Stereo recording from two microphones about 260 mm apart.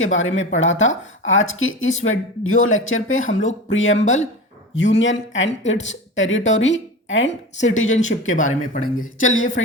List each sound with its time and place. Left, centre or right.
0.0 s speech: left
4.0 s speech: left
4.8 s a woman's voice: left
7.9 s speech: left